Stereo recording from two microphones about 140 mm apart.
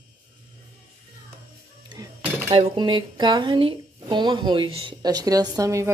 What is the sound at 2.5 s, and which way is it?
Speech, 35° right (ahead or behind).